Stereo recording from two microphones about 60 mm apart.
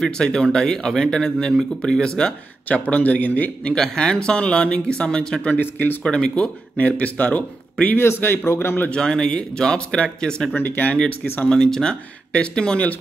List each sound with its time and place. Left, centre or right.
0.0 s speech: centre
2.8 s speech: left
3.6 s speech: centre
5.6 s a man's voice: left
6.0 s speech: centre
8.0 s a man's voice: left
8.9 s speech: centre
10.5 s a man's voice: left
10.9 s speech: left